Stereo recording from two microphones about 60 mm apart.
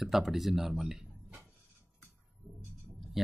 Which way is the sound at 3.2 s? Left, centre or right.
Centre.